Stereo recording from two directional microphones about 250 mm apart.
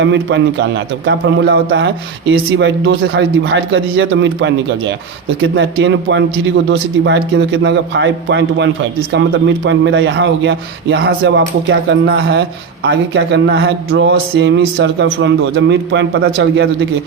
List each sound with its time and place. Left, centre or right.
0.0 s a man's voice: right